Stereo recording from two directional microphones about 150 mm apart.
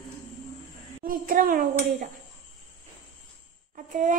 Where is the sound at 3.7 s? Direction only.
60° right (ahead or behind).